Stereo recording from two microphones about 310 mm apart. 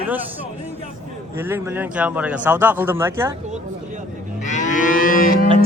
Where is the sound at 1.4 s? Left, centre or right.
Centre.